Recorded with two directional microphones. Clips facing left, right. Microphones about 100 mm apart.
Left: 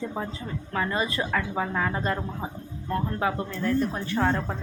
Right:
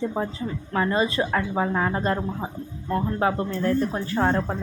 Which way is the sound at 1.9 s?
35° right (ahead or behind).